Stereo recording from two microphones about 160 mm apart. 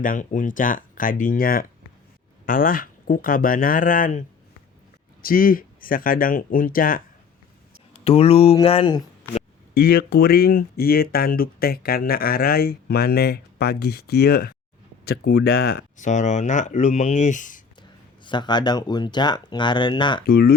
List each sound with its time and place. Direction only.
0.0 s speech: 55° left (ahead or behind)
7.9 s speech: 40° left (ahead or behind)
9.7 s speech: 70° left (ahead or behind)
16.0 s speech: 50° left (ahead or behind)
18.2 s speech: 30° left (ahead or behind)
20.2 s speech: 75° left (ahead or behind)